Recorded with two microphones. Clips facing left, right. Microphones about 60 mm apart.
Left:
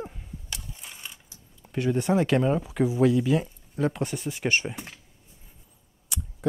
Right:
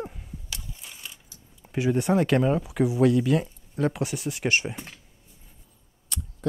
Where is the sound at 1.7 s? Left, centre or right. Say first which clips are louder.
Right 1 dB; centre.